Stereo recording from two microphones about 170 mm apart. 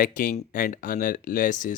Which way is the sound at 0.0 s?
55° left (ahead or behind).